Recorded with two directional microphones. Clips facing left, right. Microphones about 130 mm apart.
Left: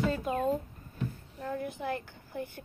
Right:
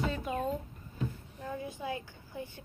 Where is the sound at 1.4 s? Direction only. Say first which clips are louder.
Left 4 dB; 55° left (ahead or behind).